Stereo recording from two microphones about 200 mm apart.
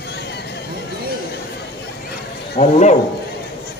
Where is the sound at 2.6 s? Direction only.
35° left (ahead or behind).